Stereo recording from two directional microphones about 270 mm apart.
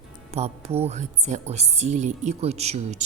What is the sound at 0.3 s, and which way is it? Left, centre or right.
Speech, right.